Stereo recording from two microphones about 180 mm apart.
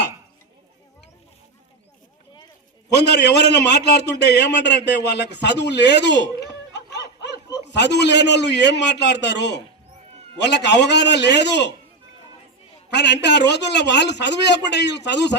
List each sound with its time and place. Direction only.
2.9 s a man's voice: 70° left (ahead or behind)
12.9 s a man's voice: 70° left (ahead or behind)